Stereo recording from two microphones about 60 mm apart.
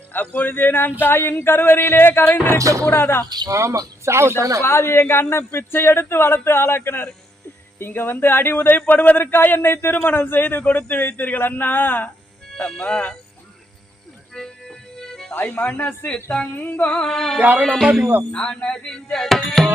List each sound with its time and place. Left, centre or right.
0.1 s speech: left
2.6 s speech: right
2.8 s speech: left
3.4 s speech: right
4.6 s speech: left
12.8 s speech: left
14.3 s music: centre
15.4 s speech: left
16.9 s music: centre